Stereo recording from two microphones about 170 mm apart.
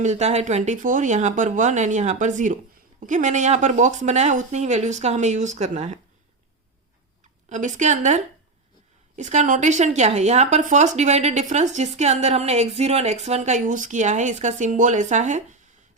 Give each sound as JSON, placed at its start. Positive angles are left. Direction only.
{"t": 0.0, "sound": "a woman's voice", "side_deg": -40}
{"t": 7.5, "sound": "a woman's voice", "side_deg": -45}